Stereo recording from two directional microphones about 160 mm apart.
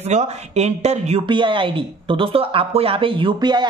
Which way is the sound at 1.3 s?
30° right (ahead or behind).